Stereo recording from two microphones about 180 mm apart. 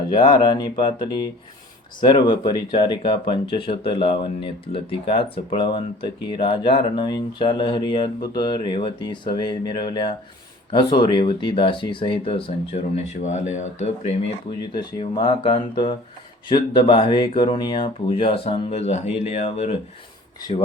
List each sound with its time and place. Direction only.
0.1 s speech: 25° left (ahead or behind)
14.8 s speech: 25° left (ahead or behind)